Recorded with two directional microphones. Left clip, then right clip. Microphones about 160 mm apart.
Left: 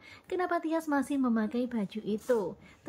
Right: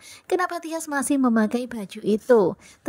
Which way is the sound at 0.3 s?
45° right (ahead or behind).